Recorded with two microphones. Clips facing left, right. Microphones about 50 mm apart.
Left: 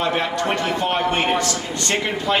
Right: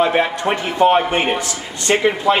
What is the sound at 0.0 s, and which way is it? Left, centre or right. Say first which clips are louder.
A man's voice: right 5 dB; right.